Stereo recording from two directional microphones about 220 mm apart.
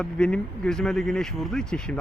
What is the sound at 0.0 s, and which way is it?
Speech, 5° left (ahead or behind).